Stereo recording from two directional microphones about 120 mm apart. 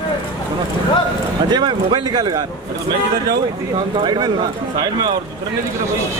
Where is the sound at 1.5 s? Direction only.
40° right (ahead or behind).